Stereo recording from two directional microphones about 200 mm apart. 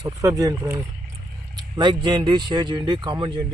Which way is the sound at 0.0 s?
15° right (ahead or behind).